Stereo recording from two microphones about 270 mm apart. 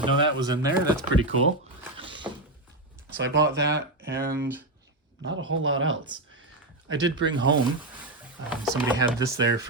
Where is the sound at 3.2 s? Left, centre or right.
Right.